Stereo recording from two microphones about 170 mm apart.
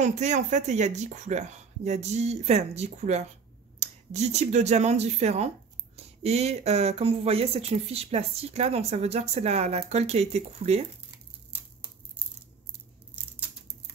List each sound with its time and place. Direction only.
0.0 s speech: 45° right (ahead or behind)